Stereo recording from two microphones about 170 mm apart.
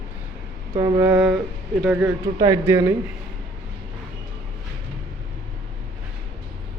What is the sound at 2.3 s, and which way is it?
Speech, 20° right (ahead or behind).